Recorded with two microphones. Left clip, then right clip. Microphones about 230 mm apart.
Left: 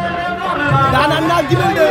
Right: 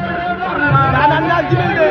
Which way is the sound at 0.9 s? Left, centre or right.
Left.